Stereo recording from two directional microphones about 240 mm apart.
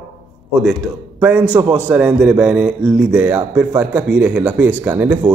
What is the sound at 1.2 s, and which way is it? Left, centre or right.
Speech, centre.